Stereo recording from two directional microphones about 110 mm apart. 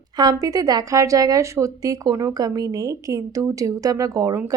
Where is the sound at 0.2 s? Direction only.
35° right (ahead or behind).